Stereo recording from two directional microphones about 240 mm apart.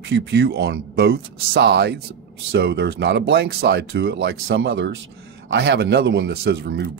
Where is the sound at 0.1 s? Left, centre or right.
Right.